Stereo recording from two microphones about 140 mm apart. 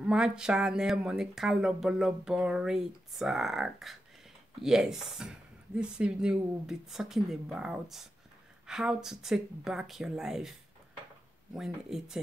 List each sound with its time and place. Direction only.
0.0 s speech: 5° right (ahead or behind)
11.5 s speech: 5° right (ahead or behind)